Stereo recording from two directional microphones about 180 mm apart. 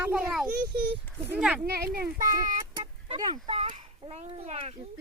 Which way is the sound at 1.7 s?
55° right (ahead or behind).